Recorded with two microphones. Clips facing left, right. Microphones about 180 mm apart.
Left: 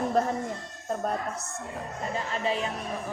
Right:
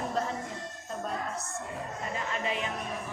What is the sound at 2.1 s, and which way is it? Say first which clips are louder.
Speech: left 4 dB; 35° left (ahead or behind).